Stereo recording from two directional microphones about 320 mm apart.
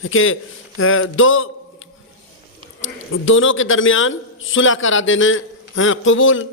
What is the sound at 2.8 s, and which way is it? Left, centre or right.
A man's voice, left.